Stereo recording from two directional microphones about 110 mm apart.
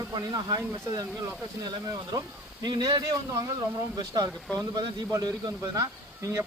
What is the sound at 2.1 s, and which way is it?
Speech, 40° right (ahead or behind).